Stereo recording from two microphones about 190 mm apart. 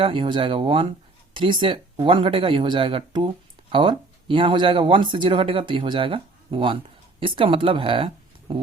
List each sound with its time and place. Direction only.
0.0 s speech: 25° right (ahead or behind)